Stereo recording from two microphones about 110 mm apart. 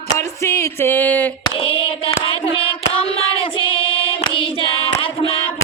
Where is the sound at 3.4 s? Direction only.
55° left (ahead or behind).